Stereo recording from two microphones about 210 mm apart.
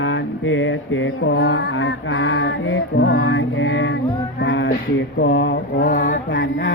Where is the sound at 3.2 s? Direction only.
70° left (ahead or behind).